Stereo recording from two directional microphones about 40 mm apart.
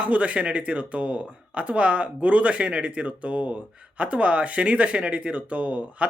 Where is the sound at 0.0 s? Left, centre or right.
Right.